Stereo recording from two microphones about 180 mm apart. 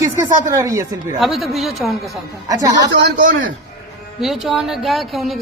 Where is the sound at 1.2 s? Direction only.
Centre (ahead or behind).